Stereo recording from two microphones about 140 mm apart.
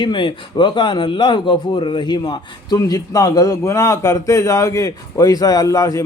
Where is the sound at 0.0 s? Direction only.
35° left (ahead or behind).